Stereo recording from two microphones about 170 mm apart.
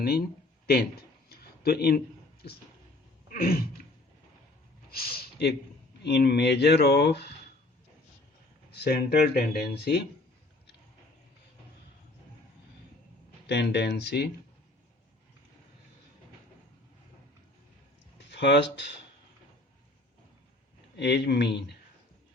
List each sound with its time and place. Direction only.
1.3 s a sound: 65° left (ahead or behind)
3.2 s a sound: 60° left (ahead or behind)
4.9 s speech: 60° left (ahead or behind); by 7.3 s 80° left
8.7 s speech: 65° left (ahead or behind)
13.5 s speech: 85° left
18.2 s speech: 90° left
21.0 s speech: 80° left